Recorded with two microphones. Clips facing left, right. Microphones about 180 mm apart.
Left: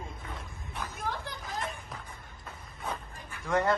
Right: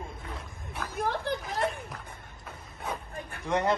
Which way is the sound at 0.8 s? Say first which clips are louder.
Right 5 dB; 60° right (ahead or behind).